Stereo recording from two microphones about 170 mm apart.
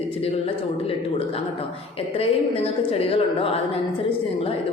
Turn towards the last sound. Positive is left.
turn(degrees=35)  # may be behind; listen again after turning